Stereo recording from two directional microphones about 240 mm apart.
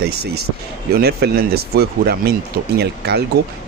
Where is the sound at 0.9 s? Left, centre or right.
Right.